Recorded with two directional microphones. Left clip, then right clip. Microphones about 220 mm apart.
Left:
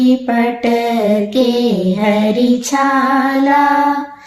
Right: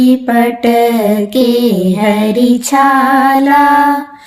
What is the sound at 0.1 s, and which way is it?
A woman's voice, 45° right (ahead or behind).